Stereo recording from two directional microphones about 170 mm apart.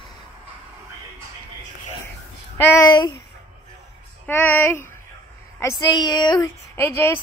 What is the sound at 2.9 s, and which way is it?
Speech, 25° left (ahead or behind).